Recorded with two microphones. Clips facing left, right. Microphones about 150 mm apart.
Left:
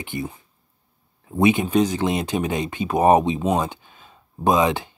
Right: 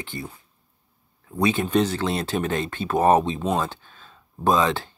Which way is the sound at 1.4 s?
15° left (ahead or behind).